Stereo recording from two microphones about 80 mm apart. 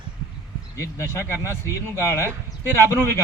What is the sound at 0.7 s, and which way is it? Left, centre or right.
A man's voice, left.